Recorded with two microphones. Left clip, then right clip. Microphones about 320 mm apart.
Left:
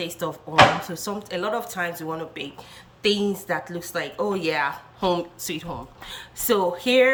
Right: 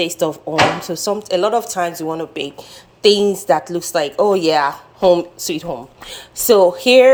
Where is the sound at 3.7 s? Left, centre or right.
Centre.